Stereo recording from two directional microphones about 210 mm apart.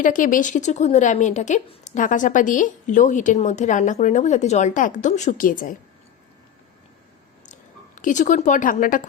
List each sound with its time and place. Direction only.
0.0 s a woman's voice: 40° left (ahead or behind)
7.9 s a woman's voice: 35° left (ahead or behind)